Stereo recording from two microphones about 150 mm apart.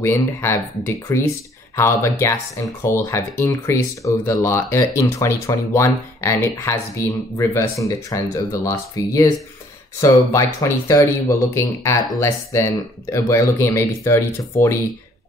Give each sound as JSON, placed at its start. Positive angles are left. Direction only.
{"t": 0.0, "sound": "speech", "side_deg": 15}